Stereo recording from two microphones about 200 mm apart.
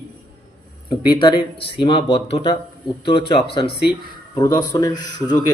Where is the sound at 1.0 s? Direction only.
20° left (ahead or behind).